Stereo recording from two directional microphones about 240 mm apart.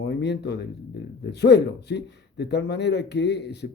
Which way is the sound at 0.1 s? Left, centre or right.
Left.